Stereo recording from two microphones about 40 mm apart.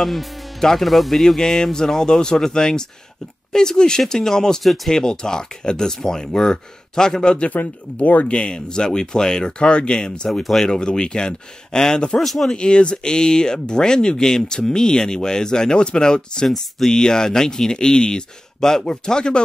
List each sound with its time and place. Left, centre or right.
0.0 s music: centre
0.7 s speech: centre
7.4 s speech: left
8.3 s speech: left
10.4 s speech: centre
10.7 s speech: left
12.2 s speech: centre
12.5 s speech: left